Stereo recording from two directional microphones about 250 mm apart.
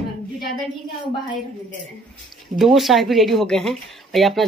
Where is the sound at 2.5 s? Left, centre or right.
Centre.